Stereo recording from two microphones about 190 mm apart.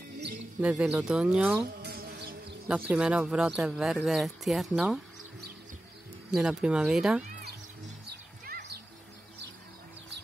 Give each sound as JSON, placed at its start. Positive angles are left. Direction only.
{"t": 0.6, "sound": "speech", "side_deg": -5}
{"t": 1.8, "sound": "bee", "side_deg": -60}
{"t": 2.7, "sound": "speech", "side_deg": -5}
{"t": 6.3, "sound": "speech", "side_deg": -5}
{"t": 8.5, "sound": "music", "side_deg": -60}